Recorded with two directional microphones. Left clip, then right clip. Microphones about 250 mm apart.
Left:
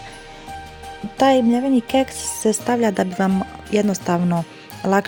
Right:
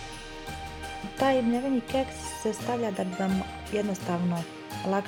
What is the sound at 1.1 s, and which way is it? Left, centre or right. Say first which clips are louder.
Speech: left 9 dB; left.